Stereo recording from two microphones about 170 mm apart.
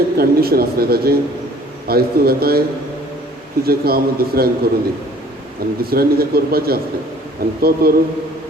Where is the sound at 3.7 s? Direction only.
65° right (ahead or behind).